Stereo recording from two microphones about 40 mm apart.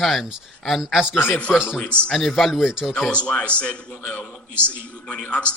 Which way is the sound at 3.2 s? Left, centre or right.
Left.